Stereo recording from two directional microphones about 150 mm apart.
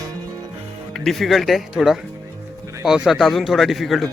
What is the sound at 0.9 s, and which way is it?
Speech, centre (ahead or behind).